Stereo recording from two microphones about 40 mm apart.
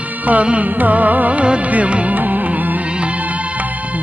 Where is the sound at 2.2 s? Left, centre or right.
Right.